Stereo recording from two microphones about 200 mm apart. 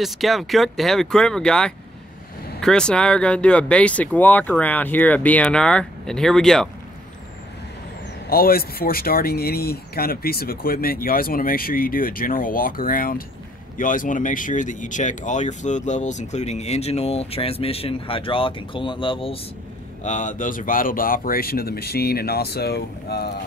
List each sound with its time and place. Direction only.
0.0 s speech: centre (ahead or behind)
8.3 s speech: 50° left (ahead or behind); by 19.4 s 25° left (ahead or behind)
20.0 s speech: 40° left (ahead or behind); by 23.4 s 55° left (ahead or behind)